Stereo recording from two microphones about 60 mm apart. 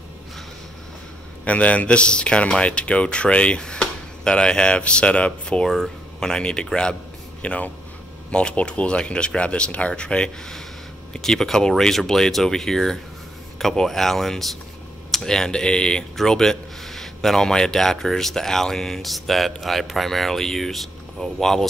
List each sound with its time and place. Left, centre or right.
1.4 s a man's voice: left
5.7 s a man's voice: centre